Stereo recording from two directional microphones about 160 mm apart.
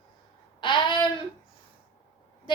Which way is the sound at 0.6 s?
30° left (ahead or behind).